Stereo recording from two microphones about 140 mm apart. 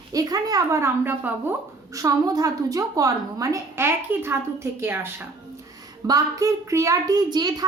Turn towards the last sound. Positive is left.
turn(degrees=-30)  # may be behind; listen again after turning